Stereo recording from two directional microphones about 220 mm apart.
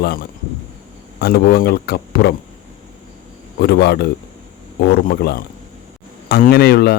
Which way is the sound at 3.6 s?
45° left (ahead or behind).